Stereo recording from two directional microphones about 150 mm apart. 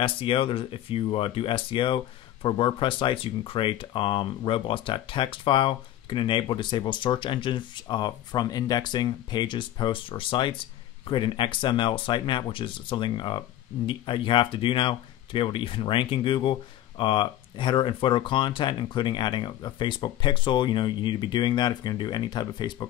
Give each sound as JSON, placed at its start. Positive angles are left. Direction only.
{"t": 0.0, "sound": "speech", "side_deg": 35}